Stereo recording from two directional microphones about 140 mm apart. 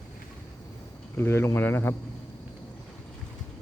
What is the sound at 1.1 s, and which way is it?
Speech, 15° left (ahead or behind).